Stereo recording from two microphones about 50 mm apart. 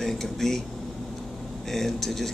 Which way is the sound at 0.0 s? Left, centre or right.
Centre.